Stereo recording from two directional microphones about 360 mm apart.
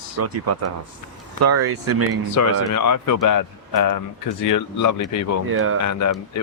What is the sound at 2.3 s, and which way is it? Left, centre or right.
Speech, left.